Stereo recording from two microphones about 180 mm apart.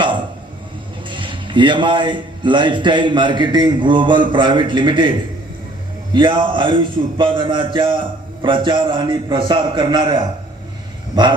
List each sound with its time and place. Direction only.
1.1 s a man's voice: 25° right (ahead or behind)
6.1 s a man's voice: 25° right (ahead or behind)
11.1 s a sound: 25° right (ahead or behind)